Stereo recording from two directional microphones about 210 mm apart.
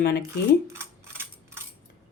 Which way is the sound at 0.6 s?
10° right (ahead or behind).